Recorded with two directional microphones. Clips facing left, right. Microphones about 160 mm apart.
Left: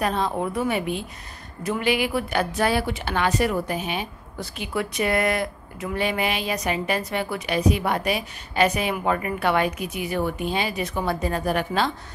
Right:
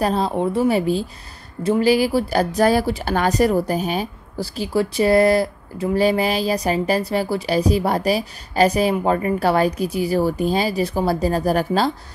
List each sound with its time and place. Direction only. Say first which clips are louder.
0.0 s a woman's voice: right 5 dB; 35° right (ahead or behind)